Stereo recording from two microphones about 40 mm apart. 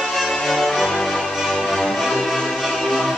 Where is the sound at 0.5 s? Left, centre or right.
Centre.